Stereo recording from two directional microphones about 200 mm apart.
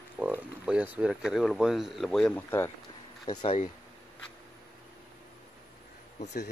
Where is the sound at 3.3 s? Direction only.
20° left (ahead or behind).